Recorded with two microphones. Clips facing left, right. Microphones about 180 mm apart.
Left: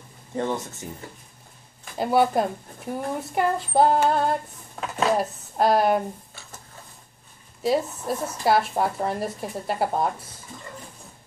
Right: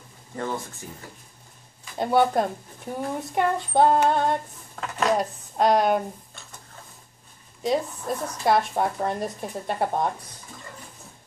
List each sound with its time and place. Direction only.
0.4 s speech: 25° left (ahead or behind)
2.0 s a woman's voice: 5° left (ahead or behind)
7.6 s a woman's voice: 5° left (ahead or behind)